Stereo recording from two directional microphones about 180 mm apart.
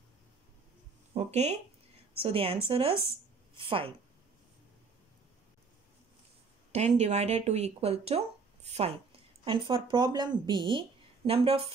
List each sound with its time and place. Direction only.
1.1 s speech: 40° right (ahead or behind)
6.7 s a woman's voice: 40° right (ahead or behind)